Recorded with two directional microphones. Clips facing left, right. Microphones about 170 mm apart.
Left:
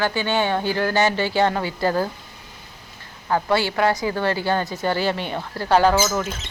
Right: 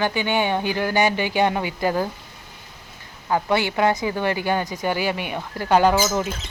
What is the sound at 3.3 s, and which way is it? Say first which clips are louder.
A woman's voice: even; 20° right (ahead or behind).